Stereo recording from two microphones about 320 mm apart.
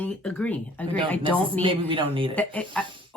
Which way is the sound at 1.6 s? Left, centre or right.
Centre.